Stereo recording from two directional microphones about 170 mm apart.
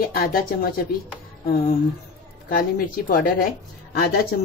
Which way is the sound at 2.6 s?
55° left (ahead or behind).